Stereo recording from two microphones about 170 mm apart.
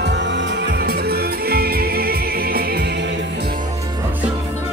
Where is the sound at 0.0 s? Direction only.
90° right.